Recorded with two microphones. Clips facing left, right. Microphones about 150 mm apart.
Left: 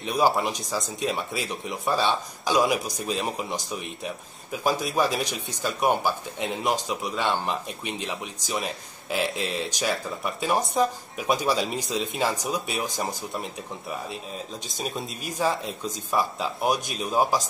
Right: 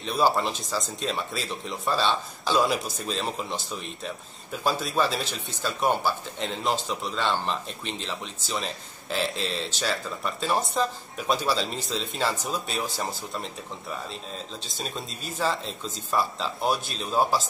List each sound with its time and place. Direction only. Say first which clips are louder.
0.0 s speech: left 1 dB; 15° left (ahead or behind)
15.2 s speech: left 2 dB; 15° left (ahead or behind)